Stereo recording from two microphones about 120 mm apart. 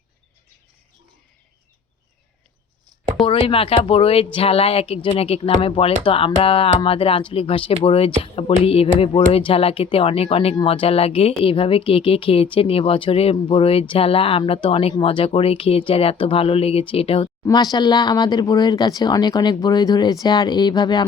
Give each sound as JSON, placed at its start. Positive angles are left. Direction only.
{"t": 3.2, "sound": "speech", "side_deg": 45}
{"t": 17.4, "sound": "speech", "side_deg": 35}